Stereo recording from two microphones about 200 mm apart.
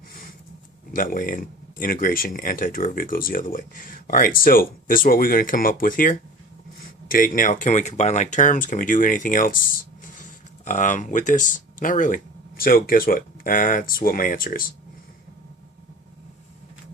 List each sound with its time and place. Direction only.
0.9 s speech: 40° left (ahead or behind)
10.7 s speech: 40° left (ahead or behind)